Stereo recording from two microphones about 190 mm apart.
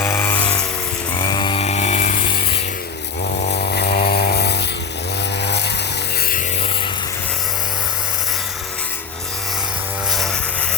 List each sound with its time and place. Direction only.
0.0 s a sound: 15° left (ahead or behind)
1.1 s chainsaw: 20° left (ahead or behind); by 5.7 s 65° left (ahead or behind)
10.1 s vehicle: centre (ahead or behind)